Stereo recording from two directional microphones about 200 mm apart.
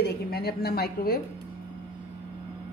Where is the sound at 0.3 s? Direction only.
50° left (ahead or behind).